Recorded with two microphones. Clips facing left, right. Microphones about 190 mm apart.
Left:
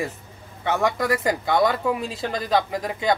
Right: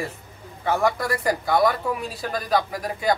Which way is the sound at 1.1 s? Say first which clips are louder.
Left 1 dB; 25° left (ahead or behind).